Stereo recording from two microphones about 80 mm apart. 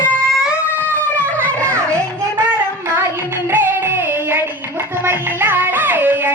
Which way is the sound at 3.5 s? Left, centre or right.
Right.